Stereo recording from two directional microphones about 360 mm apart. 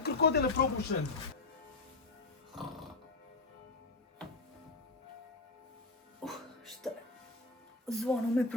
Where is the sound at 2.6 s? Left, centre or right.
Centre.